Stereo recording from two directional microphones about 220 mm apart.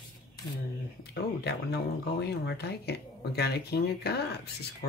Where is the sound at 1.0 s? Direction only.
50° left (ahead or behind).